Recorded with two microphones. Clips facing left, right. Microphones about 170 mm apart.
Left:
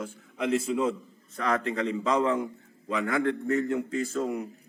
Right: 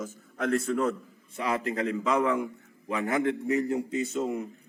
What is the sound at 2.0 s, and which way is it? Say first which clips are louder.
Speech: left 1 dB; 20° left (ahead or behind).